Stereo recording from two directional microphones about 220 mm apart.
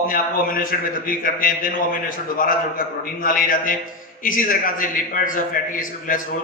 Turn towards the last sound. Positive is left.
turn(degrees=40)  # may be behind; listen again after turning